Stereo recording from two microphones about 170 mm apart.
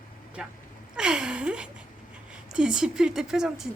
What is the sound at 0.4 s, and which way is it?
A woman's voice, 5° right (ahead or behind).